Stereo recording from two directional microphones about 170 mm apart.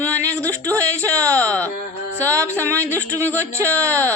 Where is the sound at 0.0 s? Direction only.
15° right (ahead or behind).